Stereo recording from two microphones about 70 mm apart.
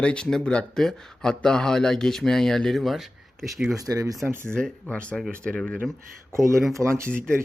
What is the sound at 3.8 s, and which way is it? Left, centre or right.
Speech, right.